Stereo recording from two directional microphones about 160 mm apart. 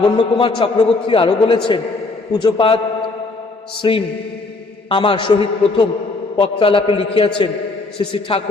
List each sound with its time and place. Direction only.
0.0 s a man's voice: 30° left (ahead or behind)
3.8 s mantra: 30° left (ahead or behind)
4.9 s a man's voice: 30° left (ahead or behind)